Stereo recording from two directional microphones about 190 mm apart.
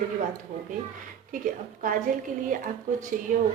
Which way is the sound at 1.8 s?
45° right (ahead or behind).